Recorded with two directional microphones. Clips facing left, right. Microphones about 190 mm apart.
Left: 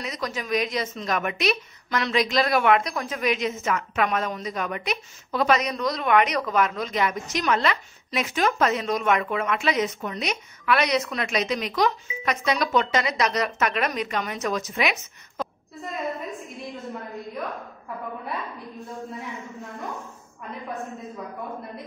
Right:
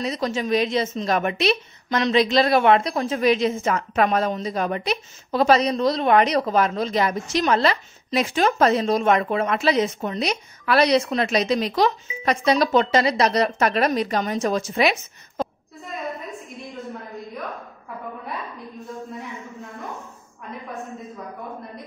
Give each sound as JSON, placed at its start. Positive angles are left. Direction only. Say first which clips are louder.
{"t": 0.0, "sound": "a woman's voice", "louder": "right 6 dB", "side_deg": -30}